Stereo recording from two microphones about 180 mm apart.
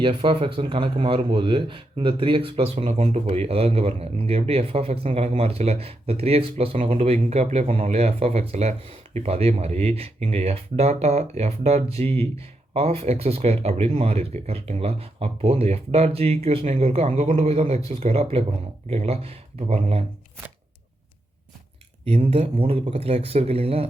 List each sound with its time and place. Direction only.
0.0 s speech: 30° right (ahead or behind)
22.1 s speech: 35° right (ahead or behind)